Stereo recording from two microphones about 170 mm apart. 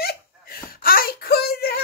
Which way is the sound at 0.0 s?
60° left (ahead or behind).